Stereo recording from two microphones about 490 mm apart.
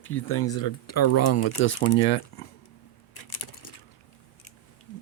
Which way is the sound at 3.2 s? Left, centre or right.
Left.